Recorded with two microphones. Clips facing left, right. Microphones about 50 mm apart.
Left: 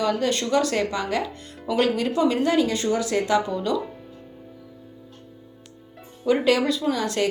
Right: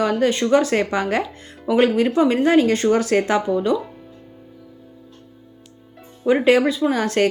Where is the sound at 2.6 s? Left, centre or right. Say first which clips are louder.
Right 6 dB; right.